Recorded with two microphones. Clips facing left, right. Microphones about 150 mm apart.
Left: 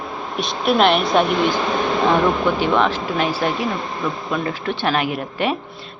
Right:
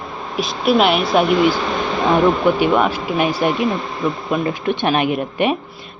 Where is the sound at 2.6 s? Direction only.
10° right (ahead or behind).